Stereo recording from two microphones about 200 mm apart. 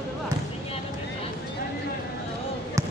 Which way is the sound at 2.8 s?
15° right (ahead or behind).